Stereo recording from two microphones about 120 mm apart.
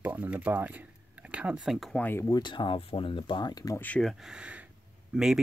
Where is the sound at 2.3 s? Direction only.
40° left (ahead or behind).